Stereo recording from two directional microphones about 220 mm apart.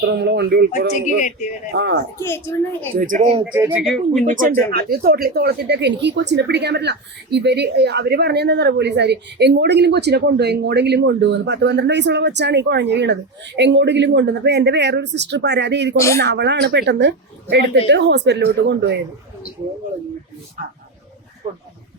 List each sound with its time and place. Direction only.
0.0 s speech: 50° right (ahead or behind)
0.9 s speech: 35° left (ahead or behind)
1.7 s speech: 50° right (ahead or behind)
2.1 s a woman's voice: 10° left (ahead or behind)
2.9 s speech: 40° right (ahead or behind)
3.5 s speech: 10° right (ahead or behind)
4.3 s speech: 40° right (ahead or behind)
16.0 s a woman's voice: 15° left (ahead or behind)
16.2 s speech: 50° right (ahead or behind)